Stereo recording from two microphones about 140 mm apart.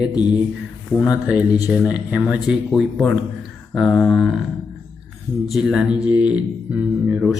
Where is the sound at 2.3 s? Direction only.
5° right (ahead or behind).